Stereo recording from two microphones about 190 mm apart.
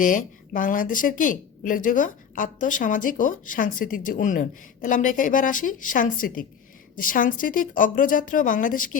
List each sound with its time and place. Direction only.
0.0 s a woman's voice: 45° left (ahead or behind)